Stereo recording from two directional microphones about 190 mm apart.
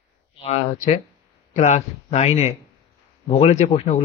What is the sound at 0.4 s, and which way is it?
A man's voice, 35° left (ahead or behind).